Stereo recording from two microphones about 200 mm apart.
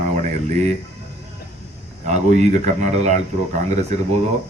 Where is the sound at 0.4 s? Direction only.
35° right (ahead or behind).